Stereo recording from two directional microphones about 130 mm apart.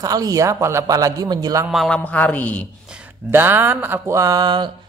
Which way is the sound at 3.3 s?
15° right (ahead or behind).